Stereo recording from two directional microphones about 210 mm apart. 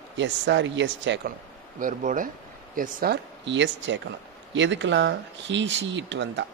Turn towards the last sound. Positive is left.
turn(degrees=-55)  # may be behind; listen again after turning